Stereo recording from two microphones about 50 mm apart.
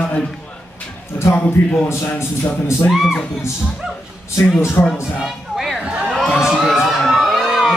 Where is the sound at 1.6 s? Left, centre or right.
Left.